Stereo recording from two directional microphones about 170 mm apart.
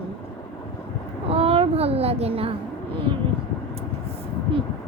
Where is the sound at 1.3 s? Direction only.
35° right (ahead or behind).